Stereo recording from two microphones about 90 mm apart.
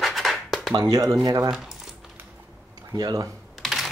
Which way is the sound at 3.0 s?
45° right (ahead or behind).